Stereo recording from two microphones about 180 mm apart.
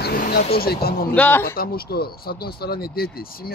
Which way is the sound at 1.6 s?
55° left (ahead or behind).